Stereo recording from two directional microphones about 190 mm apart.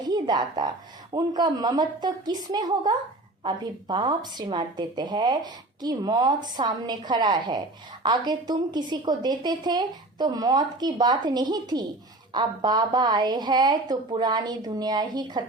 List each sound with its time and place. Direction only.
0.1 s a woman's voice: 20° right (ahead or behind)